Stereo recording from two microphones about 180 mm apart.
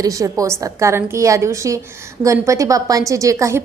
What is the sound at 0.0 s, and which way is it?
A woman's voice, 20° right (ahead or behind).